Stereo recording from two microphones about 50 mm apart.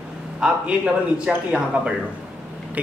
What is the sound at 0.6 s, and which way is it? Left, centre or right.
Speech, right.